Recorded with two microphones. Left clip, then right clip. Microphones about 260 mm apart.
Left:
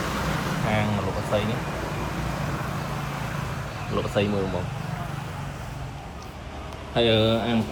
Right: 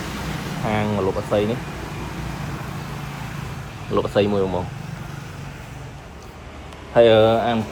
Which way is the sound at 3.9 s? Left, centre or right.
Right.